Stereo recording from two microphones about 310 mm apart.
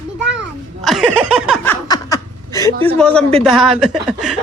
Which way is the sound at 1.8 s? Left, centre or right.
Centre.